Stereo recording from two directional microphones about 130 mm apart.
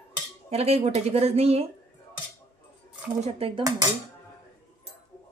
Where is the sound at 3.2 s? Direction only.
50° right (ahead or behind).